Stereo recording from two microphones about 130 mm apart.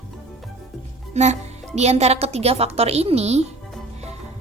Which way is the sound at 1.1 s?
60° right (ahead or behind).